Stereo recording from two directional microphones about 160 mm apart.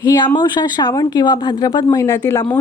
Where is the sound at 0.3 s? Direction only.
25° left (ahead or behind).